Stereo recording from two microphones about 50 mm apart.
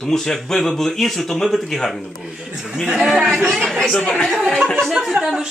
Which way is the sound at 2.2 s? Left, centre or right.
Centre.